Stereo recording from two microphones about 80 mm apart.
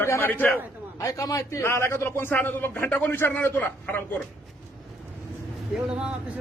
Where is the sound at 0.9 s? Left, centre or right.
Left.